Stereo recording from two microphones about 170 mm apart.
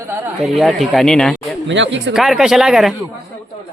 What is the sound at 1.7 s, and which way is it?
Speech, 90° right.